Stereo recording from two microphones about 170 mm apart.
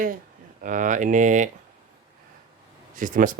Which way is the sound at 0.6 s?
50° right (ahead or behind).